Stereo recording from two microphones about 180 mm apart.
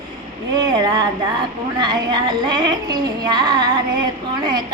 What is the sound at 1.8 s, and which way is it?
Music, 25° right (ahead or behind).